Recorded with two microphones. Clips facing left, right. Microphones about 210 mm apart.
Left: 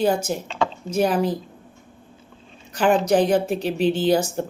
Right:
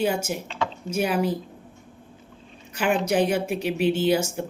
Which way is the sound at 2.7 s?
35° left (ahead or behind).